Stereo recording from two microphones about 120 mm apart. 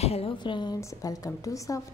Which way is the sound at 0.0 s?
55° left (ahead or behind).